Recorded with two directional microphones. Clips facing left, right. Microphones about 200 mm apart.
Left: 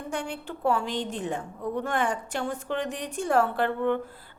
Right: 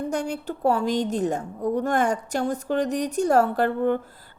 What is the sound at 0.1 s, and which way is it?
A woman's voice, 40° right (ahead or behind).